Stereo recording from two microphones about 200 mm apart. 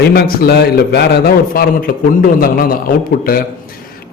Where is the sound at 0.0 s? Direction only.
50° left (ahead or behind).